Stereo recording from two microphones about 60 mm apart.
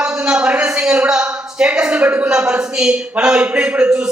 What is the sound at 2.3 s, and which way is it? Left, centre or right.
A man's voice, centre.